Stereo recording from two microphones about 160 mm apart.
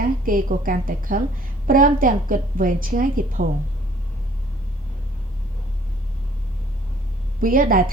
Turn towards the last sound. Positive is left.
turn(degrees=-60)  # may be behind; listen again after turning